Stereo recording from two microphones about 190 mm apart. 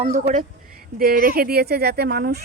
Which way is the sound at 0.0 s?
35° right (ahead or behind).